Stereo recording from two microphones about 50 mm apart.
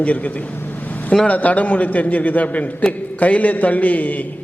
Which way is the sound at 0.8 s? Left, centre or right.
Left.